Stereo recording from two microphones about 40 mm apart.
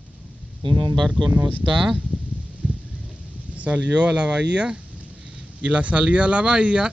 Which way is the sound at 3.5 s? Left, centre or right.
Right.